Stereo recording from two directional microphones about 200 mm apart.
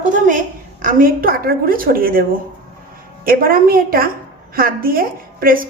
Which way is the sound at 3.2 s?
45° right (ahead or behind).